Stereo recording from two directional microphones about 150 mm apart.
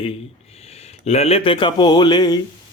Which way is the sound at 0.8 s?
45° left (ahead or behind).